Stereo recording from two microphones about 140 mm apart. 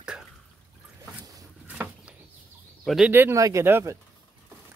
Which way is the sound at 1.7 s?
10° right (ahead or behind).